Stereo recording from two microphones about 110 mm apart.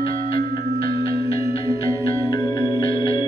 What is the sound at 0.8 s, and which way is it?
Music, 55° left (ahead or behind).